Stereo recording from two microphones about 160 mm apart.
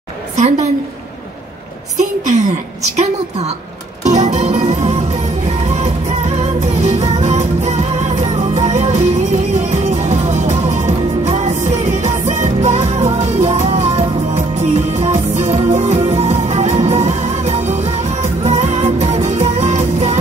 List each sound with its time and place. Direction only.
2.0 s a woman's voice: 50° right (ahead or behind)
4.0 s music: 45° right (ahead or behind)